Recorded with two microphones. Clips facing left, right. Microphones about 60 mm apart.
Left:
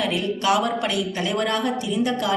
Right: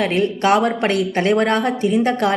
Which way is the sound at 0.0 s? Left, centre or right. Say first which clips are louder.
Right 5 dB; right.